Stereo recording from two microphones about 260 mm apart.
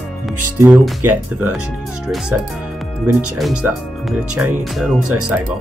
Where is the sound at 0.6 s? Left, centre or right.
Centre.